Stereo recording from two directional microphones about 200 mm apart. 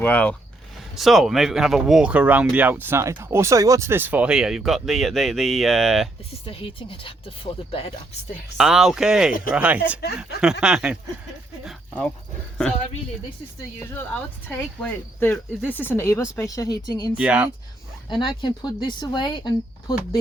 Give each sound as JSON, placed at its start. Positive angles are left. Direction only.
{"t": 0.0, "sound": "speech", "side_deg": 5}
{"t": 6.4, "sound": "speech", "side_deg": 25}
{"t": 8.5, "sound": "speech", "side_deg": 0}
{"t": 13.9, "sound": "speech", "side_deg": 10}
{"t": 17.2, "sound": "speech", "side_deg": -5}
{"t": 18.1, "sound": "speech", "side_deg": 25}